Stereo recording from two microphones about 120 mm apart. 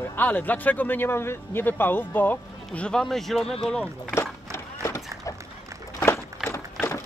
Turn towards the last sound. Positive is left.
turn(degrees=20)  # may be behind; listen again after turning